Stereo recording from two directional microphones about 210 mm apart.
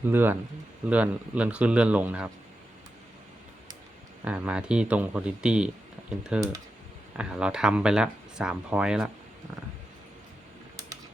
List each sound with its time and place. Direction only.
0.0 s speech: 10° right (ahead or behind)
4.2 s speech: 5° right (ahead or behind)